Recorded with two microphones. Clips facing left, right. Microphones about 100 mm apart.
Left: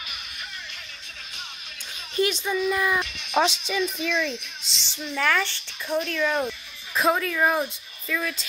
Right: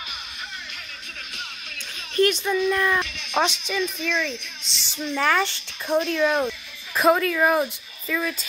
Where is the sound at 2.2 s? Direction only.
10° left (ahead or behind).